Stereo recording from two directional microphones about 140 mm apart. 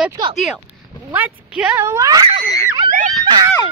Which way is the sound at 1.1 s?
10° right (ahead or behind).